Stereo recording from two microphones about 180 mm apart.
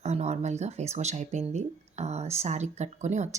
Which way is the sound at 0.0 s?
35° right (ahead or behind).